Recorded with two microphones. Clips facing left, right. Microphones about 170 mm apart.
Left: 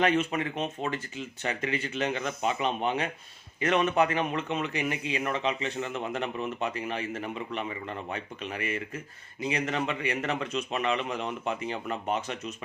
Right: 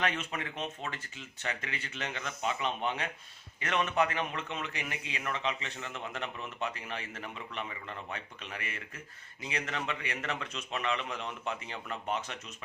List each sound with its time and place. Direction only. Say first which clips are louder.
0.0 s a man's voice: left 9 dB; 15° left (ahead or behind)